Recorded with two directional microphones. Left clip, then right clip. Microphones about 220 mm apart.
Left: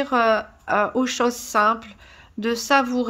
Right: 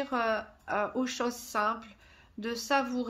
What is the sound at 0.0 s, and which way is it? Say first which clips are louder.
A woman's voice: left 11 dB; 30° left (ahead or behind).